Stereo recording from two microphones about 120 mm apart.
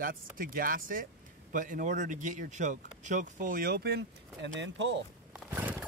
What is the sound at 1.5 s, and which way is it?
Speech, 90° right.